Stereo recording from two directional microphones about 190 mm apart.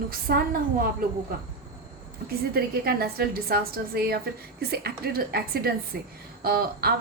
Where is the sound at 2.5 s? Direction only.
55° right (ahead or behind).